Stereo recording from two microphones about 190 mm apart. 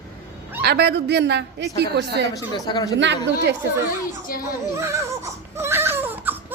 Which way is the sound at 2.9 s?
70° right (ahead or behind).